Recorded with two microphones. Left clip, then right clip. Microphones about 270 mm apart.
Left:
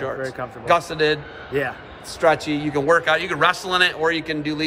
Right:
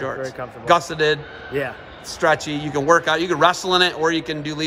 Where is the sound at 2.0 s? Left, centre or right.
Right.